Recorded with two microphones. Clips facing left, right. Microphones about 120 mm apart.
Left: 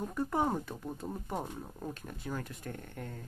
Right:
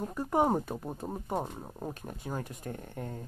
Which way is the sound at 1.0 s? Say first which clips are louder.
Right 4 dB; 30° right (ahead or behind).